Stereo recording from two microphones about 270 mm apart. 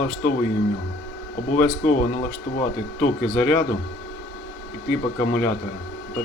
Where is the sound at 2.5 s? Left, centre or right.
Left.